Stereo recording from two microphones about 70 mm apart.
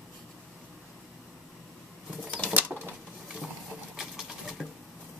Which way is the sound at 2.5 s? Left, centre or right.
Right.